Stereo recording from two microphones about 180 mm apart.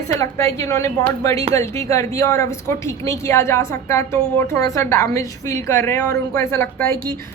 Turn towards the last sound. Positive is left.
turn(degrees=15)  # may be behind; listen again after turning